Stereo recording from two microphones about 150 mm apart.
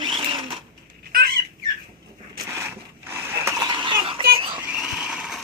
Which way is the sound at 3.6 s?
30° right (ahead or behind).